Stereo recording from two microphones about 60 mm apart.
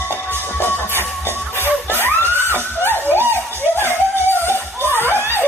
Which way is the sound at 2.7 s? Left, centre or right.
Left.